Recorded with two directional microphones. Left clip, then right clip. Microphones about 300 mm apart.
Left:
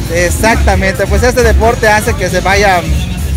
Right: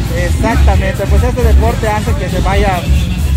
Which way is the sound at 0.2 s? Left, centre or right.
Left.